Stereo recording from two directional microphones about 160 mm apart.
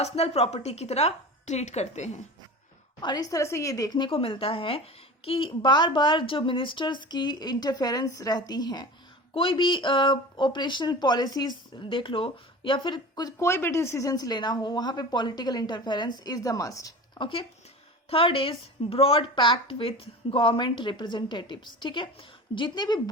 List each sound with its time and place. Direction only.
0.0 s a woman's voice: 40° left (ahead or behind)
3.0 s a woman's voice: 25° left (ahead or behind)